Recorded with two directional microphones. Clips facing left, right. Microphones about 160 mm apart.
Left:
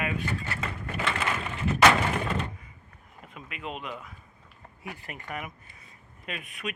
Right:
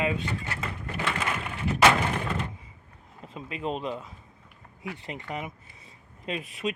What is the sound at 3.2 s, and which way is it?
Speech, 30° right (ahead or behind).